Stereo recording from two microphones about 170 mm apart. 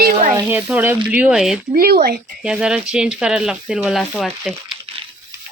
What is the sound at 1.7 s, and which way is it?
Speech, 60° right (ahead or behind).